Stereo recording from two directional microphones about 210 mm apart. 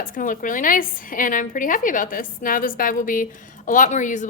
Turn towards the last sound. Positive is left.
turn(degrees=35)  # may be behind; listen again after turning